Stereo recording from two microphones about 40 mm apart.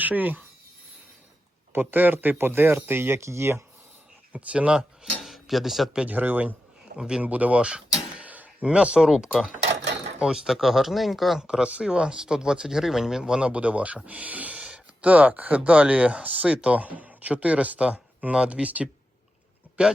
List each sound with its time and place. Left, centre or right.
0.0 s speech: right
1.7 s speech: right
2.4 s speech: right
4.3 s speech: right
5.2 s tick-tock: centre
6.1 s speech: right
6.9 s a man's voice: centre
7.2 s a sound: right
8.6 s speech: right
9.0 s speech: centre
11.3 s speech: centre
13.4 s speech: right
14.5 s a sound: centre
15.0 s speech: right